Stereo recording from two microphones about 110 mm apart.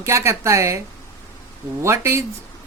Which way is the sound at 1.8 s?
25° right (ahead or behind).